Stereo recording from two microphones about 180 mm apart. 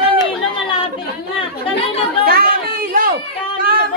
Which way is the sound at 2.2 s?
55° right (ahead or behind).